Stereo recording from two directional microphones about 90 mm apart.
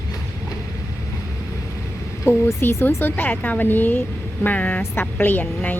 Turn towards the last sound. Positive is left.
turn(degrees=20)  # may be behind; listen again after turning